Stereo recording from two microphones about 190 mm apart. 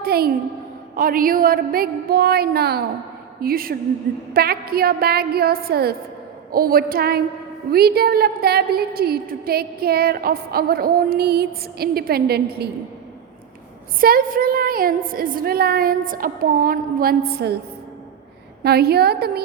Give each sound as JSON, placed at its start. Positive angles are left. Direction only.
{"t": 0.0, "sound": "a woman's voice", "side_deg": -55}
{"t": 14.0, "sound": "a woman's voice", "side_deg": -50}
{"t": 18.6, "sound": "a woman's voice", "side_deg": -55}